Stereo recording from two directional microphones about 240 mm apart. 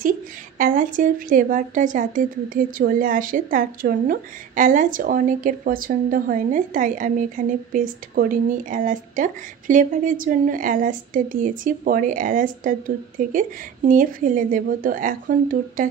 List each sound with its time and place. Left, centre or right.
0.6 s a woman's voice: right